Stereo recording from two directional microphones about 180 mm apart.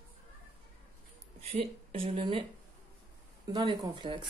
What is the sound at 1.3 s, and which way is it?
Speech, 35° right (ahead or behind).